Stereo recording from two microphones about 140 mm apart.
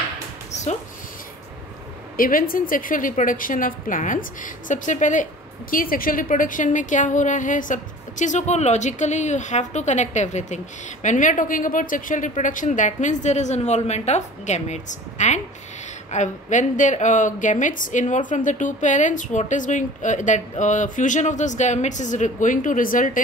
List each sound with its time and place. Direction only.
2.1 s a woman's voice: 90° left; by 23.2 s 70° left (ahead or behind)